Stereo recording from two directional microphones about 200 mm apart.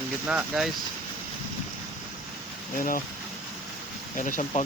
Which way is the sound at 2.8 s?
45° left (ahead or behind).